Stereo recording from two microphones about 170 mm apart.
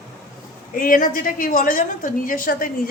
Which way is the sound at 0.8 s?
55° left (ahead or behind).